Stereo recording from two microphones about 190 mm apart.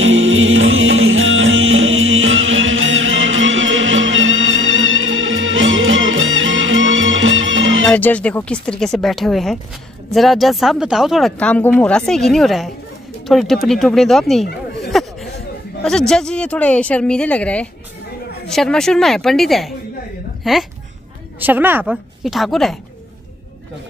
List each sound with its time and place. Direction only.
0.0 s music: 90° right
7.9 s speech: 5° left (ahead or behind)